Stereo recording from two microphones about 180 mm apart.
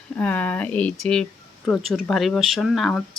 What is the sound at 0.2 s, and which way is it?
Speech, 10° left (ahead or behind).